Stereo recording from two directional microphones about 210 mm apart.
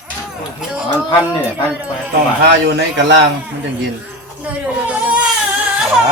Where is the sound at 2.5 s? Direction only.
55° right (ahead or behind).